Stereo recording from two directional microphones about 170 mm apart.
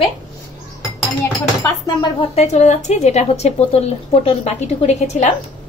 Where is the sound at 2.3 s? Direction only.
40° left (ahead or behind).